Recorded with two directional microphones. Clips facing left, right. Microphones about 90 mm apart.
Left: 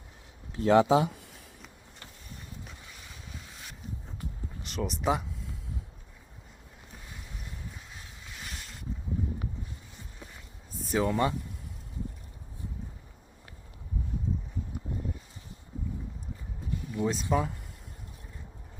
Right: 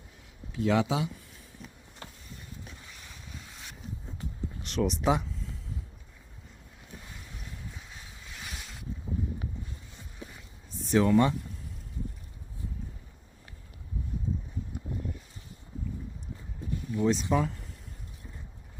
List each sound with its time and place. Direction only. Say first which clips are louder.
0.5 s speech: left 5 dB; 40° left (ahead or behind)
4.6 s speech: right 3 dB; centre (ahead or behind)
7.8 s vehicle: even; centre (ahead or behind)
10.8 s a sound: right 3 dB; centre (ahead or behind)
16.9 s speech: right 4 dB; centre (ahead or behind)
17.2 s speech: right 1 dB; 15° left (ahead or behind)